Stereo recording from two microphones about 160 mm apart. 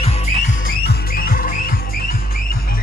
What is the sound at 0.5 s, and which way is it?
Music, 60° left (ahead or behind).